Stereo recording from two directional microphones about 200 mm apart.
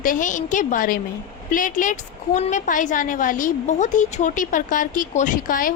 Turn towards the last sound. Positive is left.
turn(degrees=45)  # may be behind; listen again after turning